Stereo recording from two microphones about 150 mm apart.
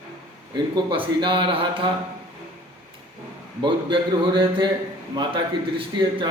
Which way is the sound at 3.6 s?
30° right (ahead or behind).